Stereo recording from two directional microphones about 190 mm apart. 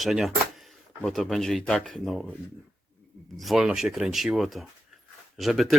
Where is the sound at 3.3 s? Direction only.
Centre (ahead or behind).